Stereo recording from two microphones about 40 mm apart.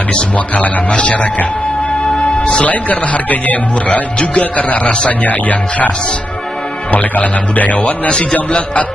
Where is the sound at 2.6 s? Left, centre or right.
Left.